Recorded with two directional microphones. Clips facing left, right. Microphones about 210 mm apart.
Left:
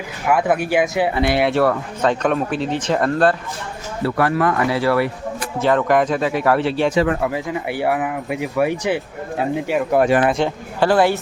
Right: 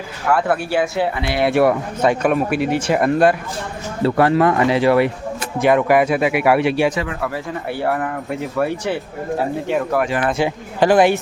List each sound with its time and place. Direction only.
0.3 s speech: 15° left (ahead or behind)
1.5 s speech: 15° right (ahead or behind)
4.0 s speech: 25° right (ahead or behind)
6.9 s speech: 40° left (ahead or behind)
7.2 s speech: 15° left (ahead or behind)
10.0 s speech: 25° left (ahead or behind)
10.3 s speech: 10° right (ahead or behind)